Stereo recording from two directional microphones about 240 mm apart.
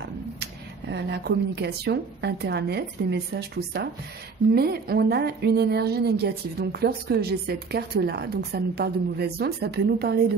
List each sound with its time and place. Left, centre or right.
0.0 s a woman's voice: right